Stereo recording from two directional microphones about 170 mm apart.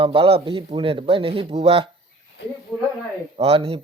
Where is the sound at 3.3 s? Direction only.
35° right (ahead or behind).